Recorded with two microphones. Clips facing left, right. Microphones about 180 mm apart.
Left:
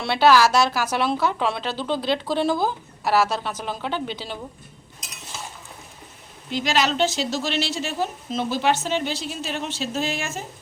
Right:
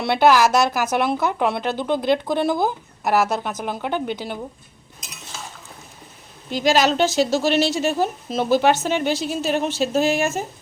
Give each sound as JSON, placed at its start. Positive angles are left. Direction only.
{"t": 0.0, "sound": "a woman's voice", "side_deg": -15}
{"t": 6.5, "sound": "speech", "side_deg": -40}